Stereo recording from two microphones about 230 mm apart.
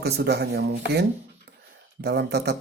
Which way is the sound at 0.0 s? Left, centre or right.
Right.